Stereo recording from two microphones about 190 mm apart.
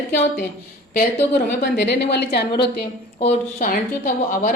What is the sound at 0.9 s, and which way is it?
A woman's voice, 55° left (ahead or behind).